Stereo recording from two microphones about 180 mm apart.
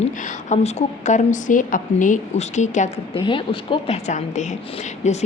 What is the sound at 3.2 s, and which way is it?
Speech, 25° left (ahead or behind).